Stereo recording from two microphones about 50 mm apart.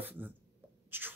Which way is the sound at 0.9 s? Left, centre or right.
Right.